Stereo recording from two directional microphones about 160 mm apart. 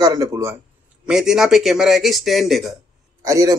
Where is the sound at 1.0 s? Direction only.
5° right (ahead or behind).